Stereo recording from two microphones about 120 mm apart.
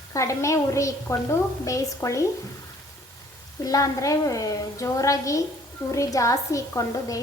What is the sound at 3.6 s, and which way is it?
A woman's voice, 30° left (ahead or behind).